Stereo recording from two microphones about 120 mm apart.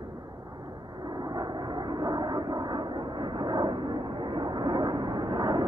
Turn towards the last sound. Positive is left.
turn(degrees=-30)  # may be behind; listen again after turning